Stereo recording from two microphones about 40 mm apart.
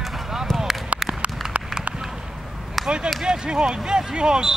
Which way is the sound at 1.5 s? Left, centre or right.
Right.